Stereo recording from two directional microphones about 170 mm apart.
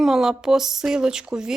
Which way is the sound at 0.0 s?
5° right (ahead or behind).